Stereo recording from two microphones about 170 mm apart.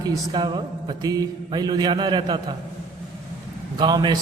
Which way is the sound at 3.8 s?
25° right (ahead or behind).